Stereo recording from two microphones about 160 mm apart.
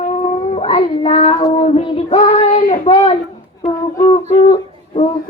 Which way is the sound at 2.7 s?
35° left (ahead or behind).